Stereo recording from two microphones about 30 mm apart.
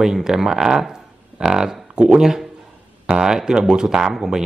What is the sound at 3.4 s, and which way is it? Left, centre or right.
Speech, right.